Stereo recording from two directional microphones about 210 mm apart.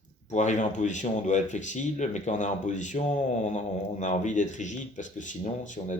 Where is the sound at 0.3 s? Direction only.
35° left (ahead or behind).